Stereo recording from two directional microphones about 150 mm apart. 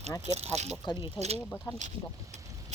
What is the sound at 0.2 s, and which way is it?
Speech, 45° right (ahead or behind).